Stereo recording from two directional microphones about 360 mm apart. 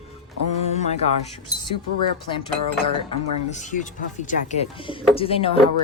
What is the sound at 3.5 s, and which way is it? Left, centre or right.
Speech, centre.